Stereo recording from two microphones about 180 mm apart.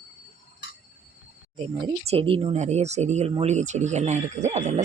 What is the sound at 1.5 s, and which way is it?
Speech, 35° right (ahead or behind).